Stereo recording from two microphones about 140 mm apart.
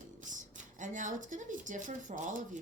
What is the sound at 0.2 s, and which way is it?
Speech, 65° right (ahead or behind).